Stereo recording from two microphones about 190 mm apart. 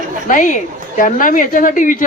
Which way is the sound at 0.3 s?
45° left (ahead or behind).